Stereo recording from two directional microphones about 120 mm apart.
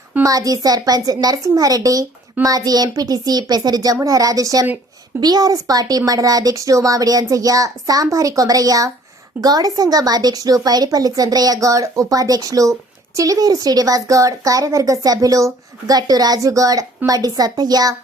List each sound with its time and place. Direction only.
0.2 s a woman's voice: 30° right (ahead or behind)